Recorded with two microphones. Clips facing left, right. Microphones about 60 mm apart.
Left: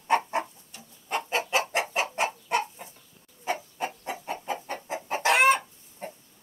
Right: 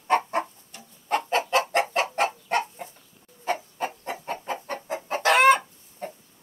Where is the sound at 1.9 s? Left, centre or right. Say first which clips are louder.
Right 3 dB; right.